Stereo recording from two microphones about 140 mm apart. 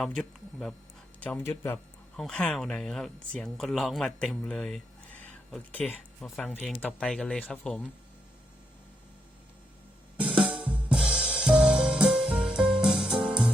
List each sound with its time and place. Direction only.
0.0 s speech: 5° left (ahead or behind)
2.1 s speech: 5° left (ahead or behind)
5.2 s a sound: 10° left (ahead or behind)
6.2 s speech: centre (ahead or behind)
10.4 s drum kit: 10° right (ahead or behind)
11.9 s music: 10° right (ahead or behind)